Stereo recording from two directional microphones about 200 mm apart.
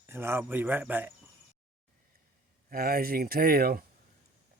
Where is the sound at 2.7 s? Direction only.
50° right (ahead or behind).